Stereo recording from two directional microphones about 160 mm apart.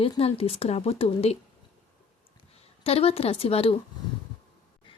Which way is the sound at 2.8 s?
40° left (ahead or behind).